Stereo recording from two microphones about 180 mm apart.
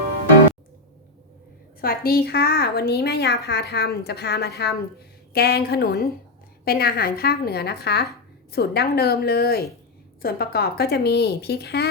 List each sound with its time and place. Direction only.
1.8 s a woman's voice: 55° left (ahead or behind)